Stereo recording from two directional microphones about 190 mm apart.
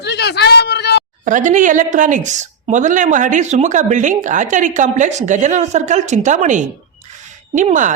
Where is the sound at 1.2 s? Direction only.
40° right (ahead or behind).